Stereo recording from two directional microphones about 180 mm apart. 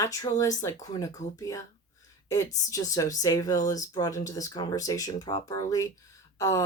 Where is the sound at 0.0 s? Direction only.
20° left (ahead or behind).